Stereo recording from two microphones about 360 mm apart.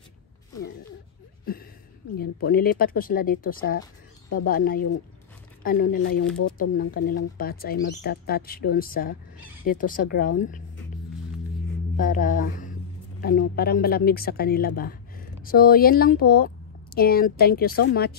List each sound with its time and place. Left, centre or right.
1.4 s a sound: left
2.1 s speech: left
6.3 s speech: left
7.3 s speech: left
12.0 s speech: left